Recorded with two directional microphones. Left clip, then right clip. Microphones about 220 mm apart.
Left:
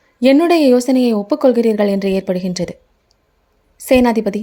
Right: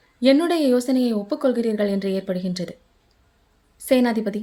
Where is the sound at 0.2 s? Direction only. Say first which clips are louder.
Left 7 dB; 30° left (ahead or behind).